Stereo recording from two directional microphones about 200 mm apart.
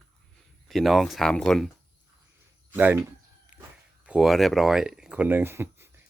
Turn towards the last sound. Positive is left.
turn(degrees=-10)  # may be behind; listen again after turning